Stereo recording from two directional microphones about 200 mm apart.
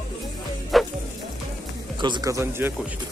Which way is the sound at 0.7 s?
Centre (ahead or behind).